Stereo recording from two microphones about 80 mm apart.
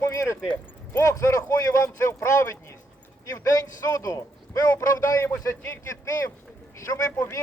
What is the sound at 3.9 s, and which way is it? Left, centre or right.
Speech, left.